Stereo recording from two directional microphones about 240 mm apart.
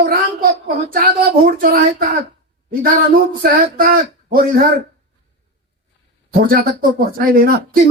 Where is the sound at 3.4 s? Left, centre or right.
Right.